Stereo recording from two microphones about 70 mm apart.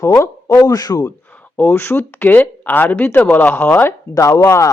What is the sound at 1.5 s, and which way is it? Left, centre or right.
Speech, left.